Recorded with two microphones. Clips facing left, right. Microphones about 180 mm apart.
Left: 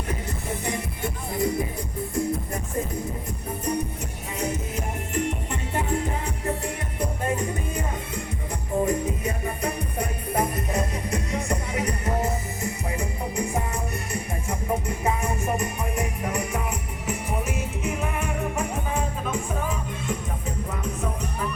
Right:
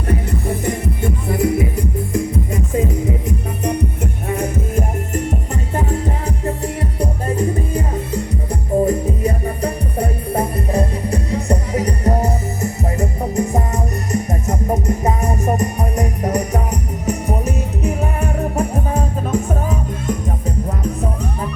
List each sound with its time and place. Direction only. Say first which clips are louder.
1.3 s music: right 8 dB; 80° right; by 20.1 s 40° right (ahead or behind)